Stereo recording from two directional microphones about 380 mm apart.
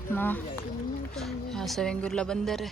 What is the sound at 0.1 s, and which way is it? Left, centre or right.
A woman's voice, centre.